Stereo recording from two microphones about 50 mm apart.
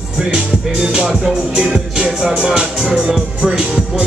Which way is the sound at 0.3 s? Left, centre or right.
Centre.